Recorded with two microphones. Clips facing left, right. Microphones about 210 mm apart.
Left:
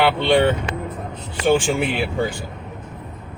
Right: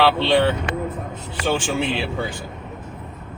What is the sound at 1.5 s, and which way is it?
Speech, 15° left (ahead or behind).